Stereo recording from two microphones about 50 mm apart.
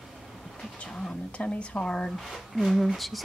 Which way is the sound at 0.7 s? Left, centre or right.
Centre.